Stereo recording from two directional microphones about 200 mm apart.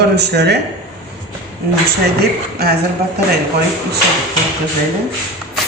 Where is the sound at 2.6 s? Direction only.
50° right (ahead or behind).